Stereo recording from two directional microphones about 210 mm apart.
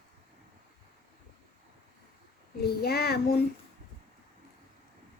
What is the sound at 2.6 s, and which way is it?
Child singing, 50° left (ahead or behind).